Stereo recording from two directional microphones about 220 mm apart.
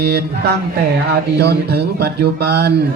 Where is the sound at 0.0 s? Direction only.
45° right (ahead or behind).